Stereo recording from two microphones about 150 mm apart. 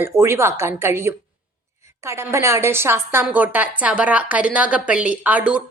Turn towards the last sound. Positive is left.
turn(degrees=-10)  # may be behind; listen again after turning